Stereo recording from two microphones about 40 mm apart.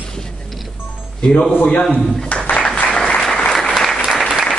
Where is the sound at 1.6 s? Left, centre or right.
Left.